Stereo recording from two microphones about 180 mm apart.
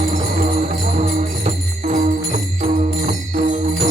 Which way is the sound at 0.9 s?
40° right (ahead or behind).